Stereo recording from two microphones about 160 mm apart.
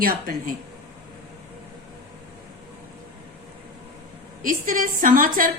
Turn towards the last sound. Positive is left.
turn(degrees=-60)  # may be behind; listen again after turning